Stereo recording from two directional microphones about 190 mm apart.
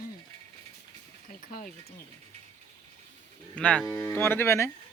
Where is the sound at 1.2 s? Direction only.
45° left (ahead or behind).